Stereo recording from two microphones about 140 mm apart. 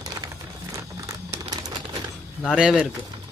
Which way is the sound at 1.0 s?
20° right (ahead or behind).